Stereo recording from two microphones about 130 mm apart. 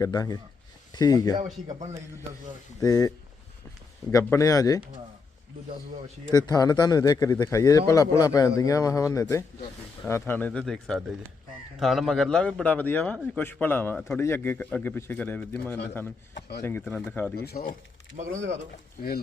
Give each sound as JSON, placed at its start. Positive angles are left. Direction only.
{"t": 0.0, "sound": "speech", "side_deg": 30}
{"t": 2.8, "sound": "speech", "side_deg": 25}
{"t": 4.1, "sound": "speech", "side_deg": 20}
{"t": 6.3, "sound": "a man's voice", "side_deg": 30}
{"t": 17.5, "sound": "speech", "side_deg": 90}